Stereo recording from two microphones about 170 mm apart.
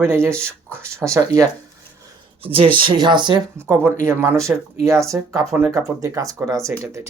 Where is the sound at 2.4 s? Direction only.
35° right (ahead or behind).